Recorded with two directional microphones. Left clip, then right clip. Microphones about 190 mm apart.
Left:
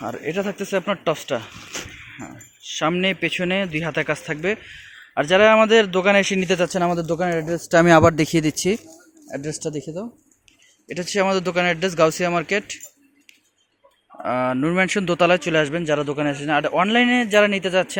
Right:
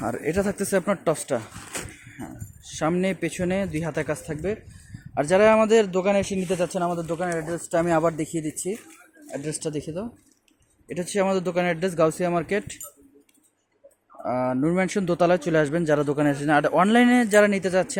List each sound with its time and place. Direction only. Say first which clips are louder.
0.0 s speech: even; 15° right (ahead or behind)
2.8 s speech: left 4 dB; centre (ahead or behind); by 6.7 s 15° left (ahead or behind)
6.9 s speech: left 5 dB; 45° left (ahead or behind)
7.2 s speech: left 5 dB; 70° left (ahead or behind)
7.9 s speech: left 9 dB; 50° left (ahead or behind)
9.3 s speech: left 2 dB; 15° left (ahead or behind)
10.8 s speech: left 3 dB; centre (ahead or behind)
14.2 s speech: left 3 dB; centre (ahead or behind)
15.8 s a man's voice: even; 20° right (ahead or behind)